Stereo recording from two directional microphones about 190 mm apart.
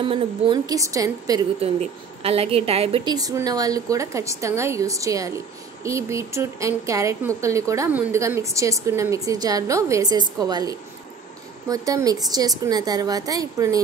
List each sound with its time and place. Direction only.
0.0 s a woman's voice: 25° right (ahead or behind)
1.6 s a woman's voice: 30° right (ahead or behind)